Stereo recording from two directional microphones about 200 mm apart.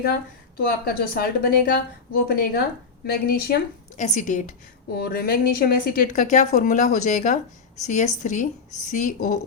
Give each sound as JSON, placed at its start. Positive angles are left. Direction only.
{"t": 0.0, "sound": "a woman's voice", "side_deg": 50}
{"t": 4.0, "sound": "a woman's voice", "side_deg": 35}
{"t": 4.9, "sound": "a woman's voice", "side_deg": 50}